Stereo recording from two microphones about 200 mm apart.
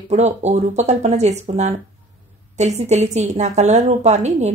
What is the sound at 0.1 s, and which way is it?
Speech, 35° right (ahead or behind).